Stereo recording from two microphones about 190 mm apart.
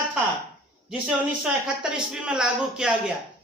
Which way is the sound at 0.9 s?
5° right (ahead or behind).